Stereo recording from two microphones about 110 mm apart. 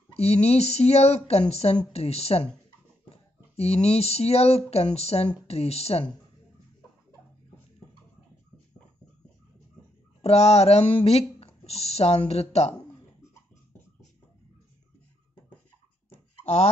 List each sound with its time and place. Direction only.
0.1 s speech: 70° left (ahead or behind)
3.5 s speech: 70° left (ahead or behind)
10.2 s speech: 70° left (ahead or behind)
16.1 s a sound: 70° left (ahead or behind)